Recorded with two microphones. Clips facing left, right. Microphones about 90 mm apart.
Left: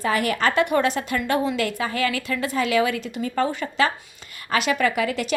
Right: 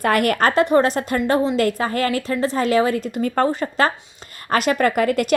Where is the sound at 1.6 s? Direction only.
40° right (ahead or behind).